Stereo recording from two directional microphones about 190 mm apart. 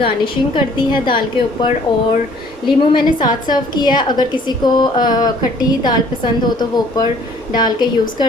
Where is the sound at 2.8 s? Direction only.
25° left (ahead or behind).